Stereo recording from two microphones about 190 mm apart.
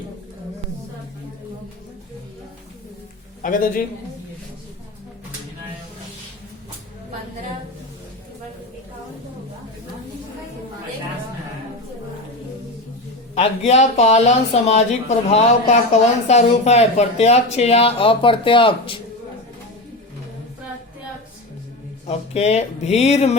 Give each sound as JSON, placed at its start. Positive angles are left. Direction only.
{"t": 3.4, "sound": "a man's voice", "side_deg": 45}
{"t": 13.3, "sound": "speech", "side_deg": 35}
{"t": 22.0, "sound": "speech", "side_deg": 35}